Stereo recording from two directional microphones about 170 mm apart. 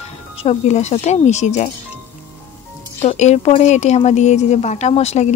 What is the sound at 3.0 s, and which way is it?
Speech, 40° left (ahead or behind).